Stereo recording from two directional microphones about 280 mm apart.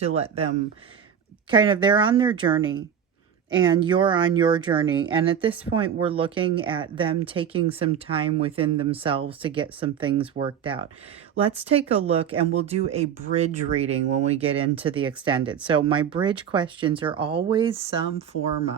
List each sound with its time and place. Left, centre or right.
0.0 s speech: right
1.5 s speech: centre